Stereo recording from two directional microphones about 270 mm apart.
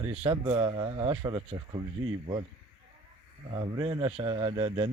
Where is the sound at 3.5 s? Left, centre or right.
Centre.